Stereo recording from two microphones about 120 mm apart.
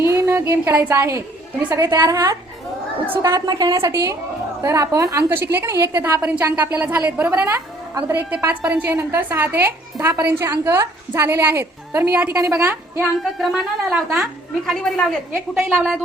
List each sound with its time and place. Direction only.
0.0 s music: 25° right (ahead or behind)
1.7 s a woman's voice: 25° right (ahead or behind)
13.0 s speech: centre (ahead or behind)
15.6 s a woman's voice: 15° right (ahead or behind)